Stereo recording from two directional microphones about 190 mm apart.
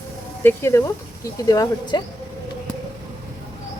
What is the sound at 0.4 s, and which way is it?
Speech, 15° left (ahead or behind).